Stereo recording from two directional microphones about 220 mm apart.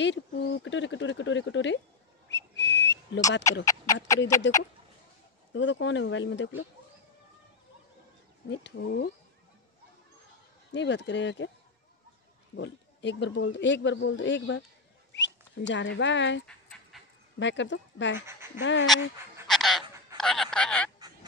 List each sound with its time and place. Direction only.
0.0 s a sound: 55° left (ahead or behind)
2.2 s whistle: 55° left (ahead or behind)
3.6 s a sound: 15° left (ahead or behind)
4.5 s speech: 55° left (ahead or behind)
8.5 s speech: 50° left (ahead or behind)
10.7 s speech: 55° left (ahead or behind)
12.5 s speech: 55° left (ahead or behind)
16.4 s dog: 5° left (ahead or behind)
17.4 s speech: 55° left (ahead or behind)
19.4 s a sound: centre (ahead or behind)